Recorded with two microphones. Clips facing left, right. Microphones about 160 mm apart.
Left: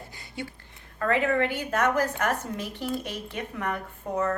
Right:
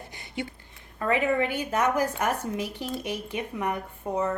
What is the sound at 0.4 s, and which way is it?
A woman's voice, 20° right (ahead or behind).